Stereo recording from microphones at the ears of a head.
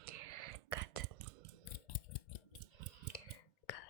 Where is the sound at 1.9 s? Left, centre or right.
Left.